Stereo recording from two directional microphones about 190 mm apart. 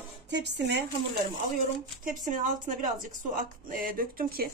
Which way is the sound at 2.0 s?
45° right (ahead or behind).